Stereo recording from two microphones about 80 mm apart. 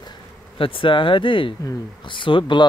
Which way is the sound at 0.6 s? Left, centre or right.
Left.